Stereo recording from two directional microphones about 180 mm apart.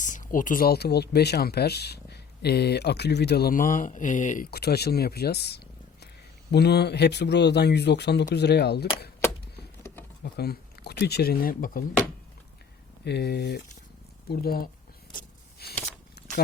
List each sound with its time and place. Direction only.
0.0 s speech: 45° left (ahead or behind)
4.5 s speech: 60° left (ahead or behind)
10.3 s speech: 60° left (ahead or behind)
13.1 s speech: 65° left (ahead or behind)
15.1 s a sound: 60° left (ahead or behind)